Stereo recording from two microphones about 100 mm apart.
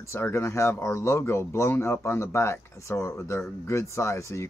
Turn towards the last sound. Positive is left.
turn(degrees=25)  # may be behind; listen again after turning